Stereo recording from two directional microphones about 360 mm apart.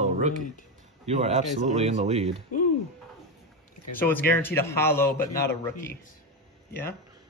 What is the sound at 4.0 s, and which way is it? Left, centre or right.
Speech, centre.